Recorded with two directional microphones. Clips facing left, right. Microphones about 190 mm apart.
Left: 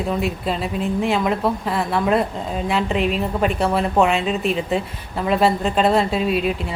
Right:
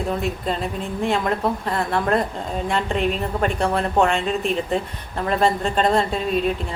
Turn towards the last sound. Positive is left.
turn(degrees=5)  # may be behind; listen again after turning